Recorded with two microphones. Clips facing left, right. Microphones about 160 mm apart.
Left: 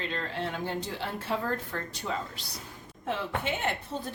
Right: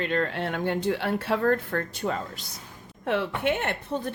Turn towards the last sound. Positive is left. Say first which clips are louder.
# right 4 dB
turn(degrees=-60)  # may be behind; listen again after turning